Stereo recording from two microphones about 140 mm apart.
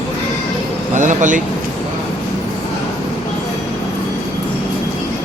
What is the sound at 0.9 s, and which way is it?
Speech, 65° right (ahead or behind).